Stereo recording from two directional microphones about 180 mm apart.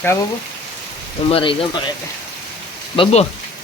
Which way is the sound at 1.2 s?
30° left (ahead or behind).